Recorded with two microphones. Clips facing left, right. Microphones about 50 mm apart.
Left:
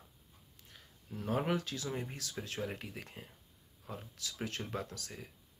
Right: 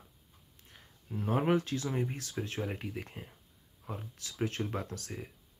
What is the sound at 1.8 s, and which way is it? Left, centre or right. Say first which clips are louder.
Speech: right 5 dB; centre.